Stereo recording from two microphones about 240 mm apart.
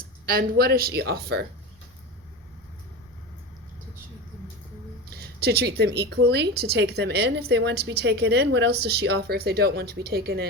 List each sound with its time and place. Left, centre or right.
0.3 s speech: right
5.1 s speech: right